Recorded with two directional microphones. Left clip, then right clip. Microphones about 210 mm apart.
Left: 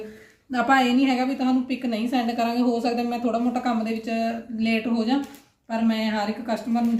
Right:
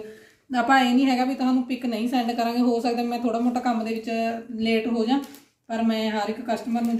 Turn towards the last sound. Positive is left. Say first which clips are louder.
# left 1 dB
turn(degrees=5)  # may be behind; listen again after turning